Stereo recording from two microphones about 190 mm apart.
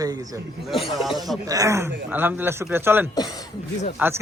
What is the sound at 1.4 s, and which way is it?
Speech, 15° right (ahead or behind).